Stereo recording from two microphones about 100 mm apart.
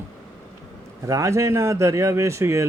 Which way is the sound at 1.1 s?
30° right (ahead or behind).